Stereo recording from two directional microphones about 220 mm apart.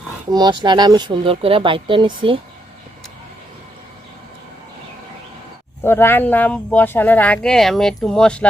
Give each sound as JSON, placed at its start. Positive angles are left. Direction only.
{"t": 0.3, "sound": "speech", "side_deg": -20}
{"t": 5.8, "sound": "speech", "side_deg": 10}